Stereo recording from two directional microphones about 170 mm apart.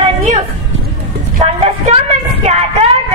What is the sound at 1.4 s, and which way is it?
Speech, 40° right (ahead or behind).